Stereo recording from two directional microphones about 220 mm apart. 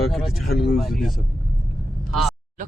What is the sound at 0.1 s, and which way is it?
Speech, centre (ahead or behind).